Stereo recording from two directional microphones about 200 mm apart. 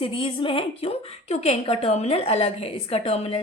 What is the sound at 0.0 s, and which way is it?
A woman's voice, 25° left (ahead or behind).